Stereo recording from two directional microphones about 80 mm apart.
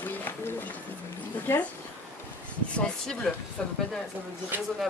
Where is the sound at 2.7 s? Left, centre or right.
Centre.